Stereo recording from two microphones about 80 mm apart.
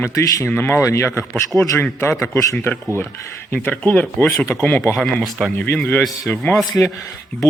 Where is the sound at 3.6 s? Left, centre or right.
Left.